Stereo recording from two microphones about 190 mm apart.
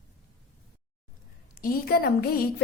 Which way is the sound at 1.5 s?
50° left (ahead or behind).